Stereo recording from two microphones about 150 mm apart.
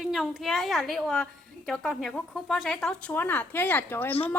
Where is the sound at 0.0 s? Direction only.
Centre (ahead or behind).